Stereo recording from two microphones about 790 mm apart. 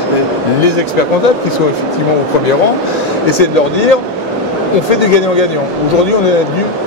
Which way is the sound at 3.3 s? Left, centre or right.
Left.